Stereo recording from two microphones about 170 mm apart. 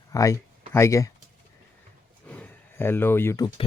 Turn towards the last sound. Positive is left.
turn(degrees=15)  # may be behind; listen again after turning